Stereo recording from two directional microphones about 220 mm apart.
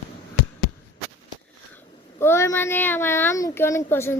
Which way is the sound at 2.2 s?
10° left (ahead or behind).